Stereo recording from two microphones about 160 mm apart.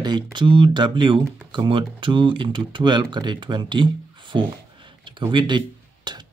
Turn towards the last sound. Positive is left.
turn(degrees=-25)  # may be behind; listen again after turning